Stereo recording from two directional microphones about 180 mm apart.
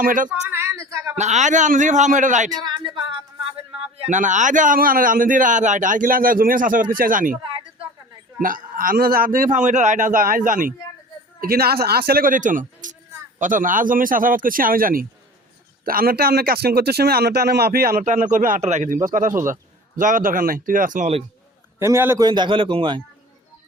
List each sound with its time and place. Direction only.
0.0 s a man's voice: 50° right (ahead or behind)
0.3 s a sound: 10° right (ahead or behind)
1.2 s a man's voice: 40° right (ahead or behind)
2.6 s a sound: 25° right (ahead or behind)
3.9 s a man's voice: 40° right (ahead or behind)
8.4 s a man's voice: 50° right (ahead or behind)
21.8 s a man's voice: 15° right (ahead or behind)